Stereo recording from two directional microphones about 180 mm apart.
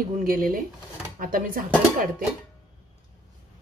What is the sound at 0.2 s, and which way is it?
A woman's voice, 50° right (ahead or behind).